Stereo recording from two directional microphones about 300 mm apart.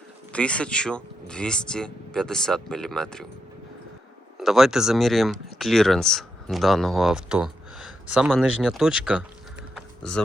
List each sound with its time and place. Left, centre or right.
0.3 s speech: centre
4.4 s speech: centre
9.7 s typing: centre